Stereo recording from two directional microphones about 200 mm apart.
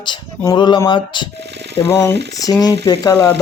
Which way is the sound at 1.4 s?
60° right (ahead or behind).